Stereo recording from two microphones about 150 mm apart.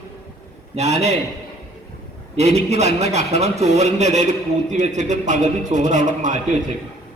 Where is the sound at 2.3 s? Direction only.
45° right (ahead or behind).